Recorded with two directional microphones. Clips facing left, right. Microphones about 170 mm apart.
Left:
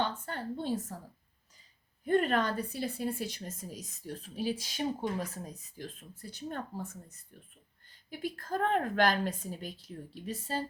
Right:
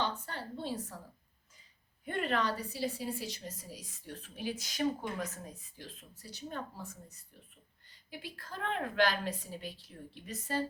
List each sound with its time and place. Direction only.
0.3 s a woman's voice: 45° left (ahead or behind)
2.0 s speech: 45° left (ahead or behind)
8.2 s speech: 45° left (ahead or behind)
10.2 s a woman's voice: 30° left (ahead or behind)